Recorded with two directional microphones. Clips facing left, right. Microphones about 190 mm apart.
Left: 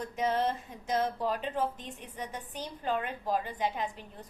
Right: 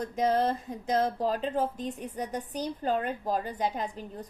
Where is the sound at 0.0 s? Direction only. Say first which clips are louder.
Right 4 dB; 35° right (ahead or behind).